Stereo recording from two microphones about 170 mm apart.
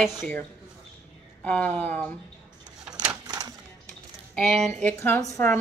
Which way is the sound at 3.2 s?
25° right (ahead or behind).